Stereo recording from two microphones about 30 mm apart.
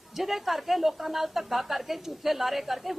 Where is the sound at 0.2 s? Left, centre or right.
Centre.